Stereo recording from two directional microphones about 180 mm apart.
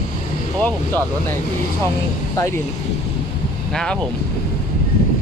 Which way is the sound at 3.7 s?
5° left (ahead or behind).